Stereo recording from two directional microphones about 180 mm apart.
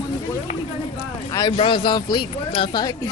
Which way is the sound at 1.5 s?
30° left (ahead or behind).